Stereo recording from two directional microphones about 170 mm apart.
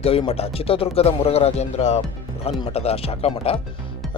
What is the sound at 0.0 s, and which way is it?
Speech, 35° left (ahead or behind).